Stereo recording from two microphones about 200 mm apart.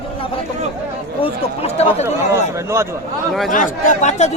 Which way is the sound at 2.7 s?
15° right (ahead or behind).